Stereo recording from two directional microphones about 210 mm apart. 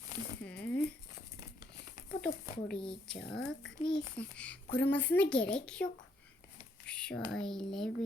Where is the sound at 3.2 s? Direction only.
55° left (ahead or behind).